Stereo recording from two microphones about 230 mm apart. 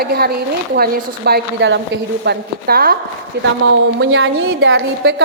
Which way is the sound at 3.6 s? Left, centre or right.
Right.